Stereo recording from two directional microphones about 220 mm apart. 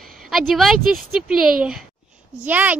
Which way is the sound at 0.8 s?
40° right (ahead or behind).